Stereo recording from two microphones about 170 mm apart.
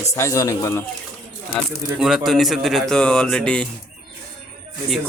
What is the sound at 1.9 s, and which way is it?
A man's voice, centre (ahead or behind).